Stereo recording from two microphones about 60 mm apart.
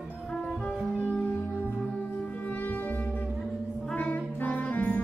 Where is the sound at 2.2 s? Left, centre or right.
Left.